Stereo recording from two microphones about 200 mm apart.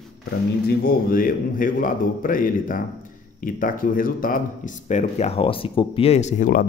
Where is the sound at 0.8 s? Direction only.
45° left (ahead or behind).